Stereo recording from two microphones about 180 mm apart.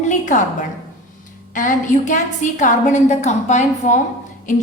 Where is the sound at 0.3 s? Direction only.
45° left (ahead or behind).